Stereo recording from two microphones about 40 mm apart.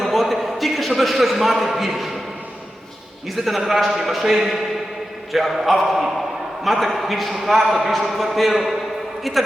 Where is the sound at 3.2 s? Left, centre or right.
Centre.